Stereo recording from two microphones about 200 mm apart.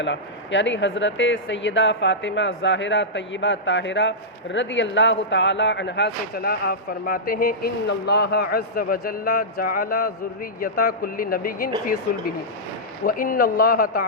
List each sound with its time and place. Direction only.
0.0 s a man's voice: 65° left (ahead or behind); by 11.7 s 45° left (ahead or behind)
13.1 s a man's voice: 45° left (ahead or behind)